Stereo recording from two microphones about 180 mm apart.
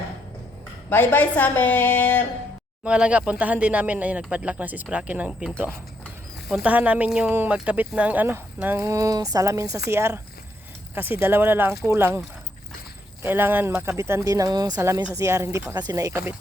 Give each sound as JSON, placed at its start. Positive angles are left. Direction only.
{"t": 0.9, "sound": "a woman's voice", "side_deg": 10}
{"t": 2.8, "sound": "speech", "side_deg": -5}
{"t": 6.5, "sound": "speech", "side_deg": -5}
{"t": 13.2, "sound": "speech", "side_deg": -10}